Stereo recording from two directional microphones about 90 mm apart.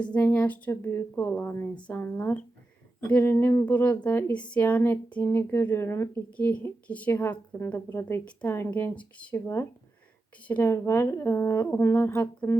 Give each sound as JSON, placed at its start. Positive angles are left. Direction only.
{"t": 0.0, "sound": "speech", "side_deg": 15}
{"t": 0.7, "sound": "a woman's voice", "side_deg": 30}
{"t": 1.7, "sound": "speech", "side_deg": 15}
{"t": 2.0, "sound": "a woman's voice", "side_deg": 25}
{"t": 3.7, "sound": "a woman's voice", "side_deg": 20}
{"t": 5.2, "sound": "a woman's voice", "side_deg": 30}
{"t": 6.3, "sound": "a woman's voice", "side_deg": 15}
{"t": 8.2, "sound": "speech", "side_deg": 15}
{"t": 8.5, "sound": "a woman's voice", "side_deg": 25}
{"t": 9.3, "sound": "speech", "side_deg": 30}
{"t": 10.4, "sound": "speech", "side_deg": 15}
{"t": 10.7, "sound": "a woman's voice", "side_deg": 25}